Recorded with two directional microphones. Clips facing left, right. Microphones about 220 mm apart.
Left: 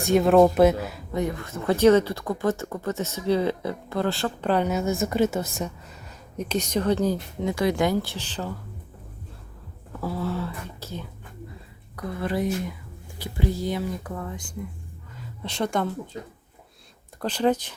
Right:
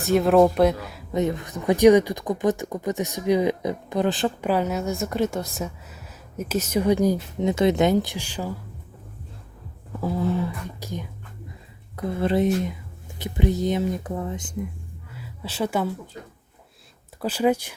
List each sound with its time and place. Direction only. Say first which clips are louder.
0.0 s speech: even; centre (ahead or behind)
1.1 s speech: right 4 dB; 20° right (ahead or behind)
4.4 s speech: left 3 dB; 5° right (ahead or behind)
10.0 s speech: right 4 dB; 20° right (ahead or behind)
11.9 s speech: right 5 dB; 25° right (ahead or behind)
15.1 s a sound: even; 5° right (ahead or behind)
17.2 s speech: right 1 dB; 10° right (ahead or behind)